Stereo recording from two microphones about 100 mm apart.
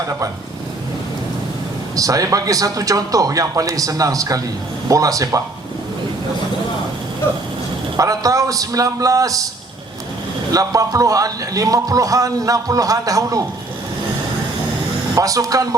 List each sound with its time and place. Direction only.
2.0 s a man's voice: 35° right (ahead or behind)
7.9 s a man's voice: 35° right (ahead or behind)
10.5 s a man's voice: 35° right (ahead or behind)
15.1 s a man's voice: 35° right (ahead or behind)